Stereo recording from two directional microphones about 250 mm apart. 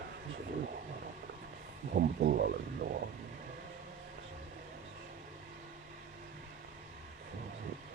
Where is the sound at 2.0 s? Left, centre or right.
Right.